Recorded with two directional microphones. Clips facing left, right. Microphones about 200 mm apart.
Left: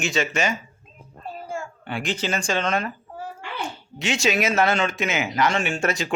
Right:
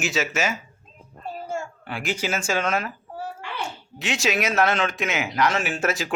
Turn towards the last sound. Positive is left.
turn(degrees=0)  # may be behind; listen again after turning